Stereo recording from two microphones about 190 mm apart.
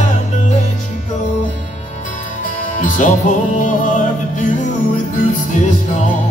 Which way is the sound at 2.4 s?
45° left (ahead or behind).